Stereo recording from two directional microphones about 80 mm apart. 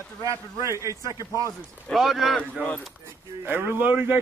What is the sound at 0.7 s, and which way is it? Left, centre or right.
Speech, right.